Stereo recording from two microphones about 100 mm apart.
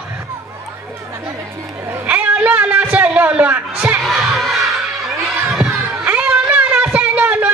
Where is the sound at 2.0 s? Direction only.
15° right (ahead or behind).